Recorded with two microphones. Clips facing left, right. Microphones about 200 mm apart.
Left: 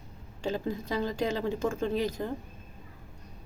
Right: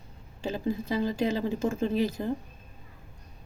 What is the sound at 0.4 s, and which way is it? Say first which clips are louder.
Speech: right 1 dB; 5° right (ahead or behind).